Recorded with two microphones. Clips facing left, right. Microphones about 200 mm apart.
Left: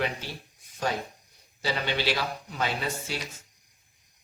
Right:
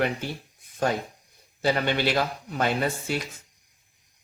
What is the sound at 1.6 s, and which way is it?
Speech, 55° right (ahead or behind).